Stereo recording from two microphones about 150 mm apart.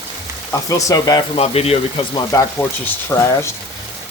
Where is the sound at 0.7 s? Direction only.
25° left (ahead or behind).